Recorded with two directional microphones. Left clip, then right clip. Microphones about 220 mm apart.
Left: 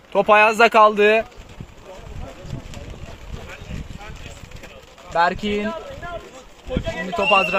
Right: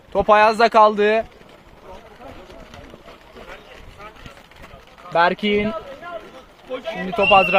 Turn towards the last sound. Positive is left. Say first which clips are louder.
# right 3 dB
turn(degrees=-30)  # may be behind; listen again after turning